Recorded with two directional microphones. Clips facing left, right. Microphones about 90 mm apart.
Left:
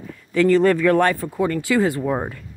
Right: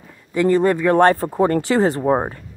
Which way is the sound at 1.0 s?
40° right (ahead or behind).